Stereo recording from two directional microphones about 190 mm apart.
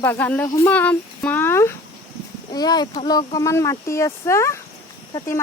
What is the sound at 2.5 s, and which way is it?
Speech, 20° left (ahead or behind).